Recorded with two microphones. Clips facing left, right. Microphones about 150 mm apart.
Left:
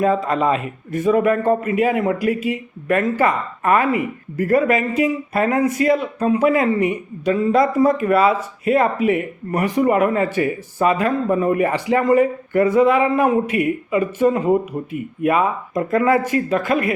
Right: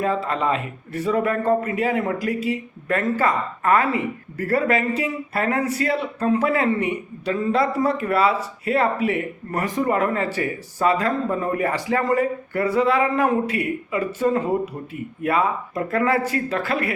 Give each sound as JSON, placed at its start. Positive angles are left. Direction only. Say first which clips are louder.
{"t": 0.0, "sound": "speech", "louder": "left 5 dB", "side_deg": 15}